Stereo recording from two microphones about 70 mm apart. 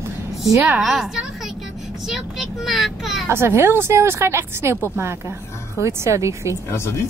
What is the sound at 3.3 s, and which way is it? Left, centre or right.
A woman's voice, right.